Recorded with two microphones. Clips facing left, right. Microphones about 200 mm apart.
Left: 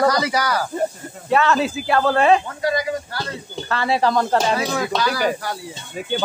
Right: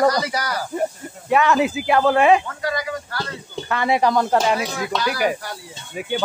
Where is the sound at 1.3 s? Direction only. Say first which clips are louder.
Right 1 dB; 15° right (ahead or behind).